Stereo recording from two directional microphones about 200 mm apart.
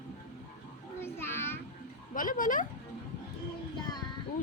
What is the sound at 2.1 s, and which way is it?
Speech, 40° left (ahead or behind).